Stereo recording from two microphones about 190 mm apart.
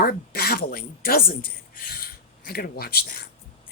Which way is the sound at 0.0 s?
55° left (ahead or behind).